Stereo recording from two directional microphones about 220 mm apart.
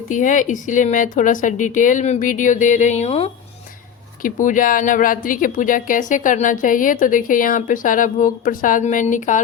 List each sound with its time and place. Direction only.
0.1 s speech: 35° left (ahead or behind)